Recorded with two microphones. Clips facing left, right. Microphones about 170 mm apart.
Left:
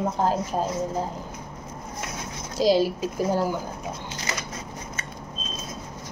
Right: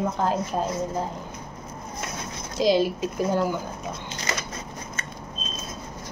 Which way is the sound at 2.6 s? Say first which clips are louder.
Left 1 dB; 40° left (ahead or behind).